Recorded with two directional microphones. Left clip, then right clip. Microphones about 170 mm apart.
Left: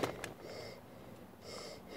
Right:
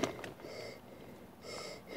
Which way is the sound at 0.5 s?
10° right (ahead or behind).